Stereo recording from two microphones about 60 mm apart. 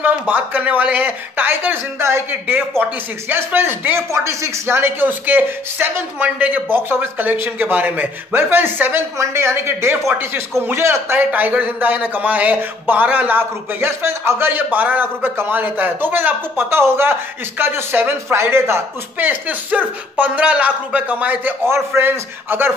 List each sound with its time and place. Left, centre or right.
0.0 s speech: right
2.0 s speech: right
2.8 s a man's voice: right
4.1 s speech: right
5.2 s a man's voice: right
9.2 s speech: right
11.1 s a man's voice: right
19.1 s speech: right
21.6 s a man's voice: right